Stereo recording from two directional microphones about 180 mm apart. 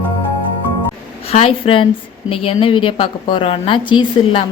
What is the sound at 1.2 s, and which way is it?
A woman's voice, 35° left (ahead or behind).